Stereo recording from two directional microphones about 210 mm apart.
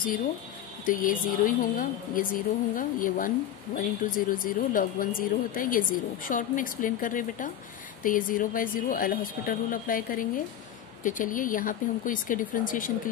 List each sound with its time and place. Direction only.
0.8 s a woman's voice: 40° left (ahead or behind)